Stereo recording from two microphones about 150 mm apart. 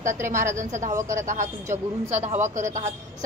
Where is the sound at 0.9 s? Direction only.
20° right (ahead or behind).